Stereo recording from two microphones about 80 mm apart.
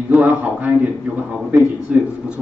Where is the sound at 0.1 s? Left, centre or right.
Centre.